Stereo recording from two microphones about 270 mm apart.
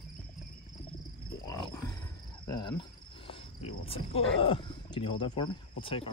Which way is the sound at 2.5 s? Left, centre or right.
Centre.